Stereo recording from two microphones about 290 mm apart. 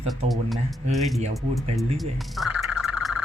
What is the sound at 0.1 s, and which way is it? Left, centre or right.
Speech, centre.